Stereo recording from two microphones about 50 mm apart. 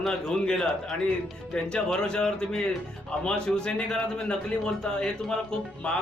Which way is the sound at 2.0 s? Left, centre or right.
Centre.